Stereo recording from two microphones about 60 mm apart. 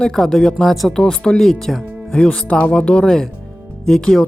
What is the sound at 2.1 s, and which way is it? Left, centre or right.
Speech, centre.